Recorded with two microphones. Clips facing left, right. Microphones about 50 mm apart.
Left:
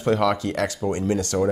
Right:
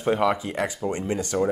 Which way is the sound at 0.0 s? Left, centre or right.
Centre.